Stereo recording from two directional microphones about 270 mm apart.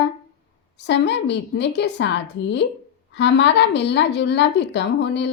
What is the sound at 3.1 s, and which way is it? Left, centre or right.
A woman's voice, left.